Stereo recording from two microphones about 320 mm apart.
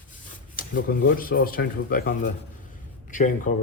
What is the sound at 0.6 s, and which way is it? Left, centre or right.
Speech, left.